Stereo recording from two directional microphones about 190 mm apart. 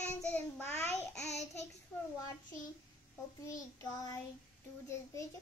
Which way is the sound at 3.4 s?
20° left (ahead or behind).